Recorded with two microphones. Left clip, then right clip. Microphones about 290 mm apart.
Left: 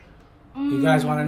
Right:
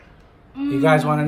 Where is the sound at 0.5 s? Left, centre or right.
Centre.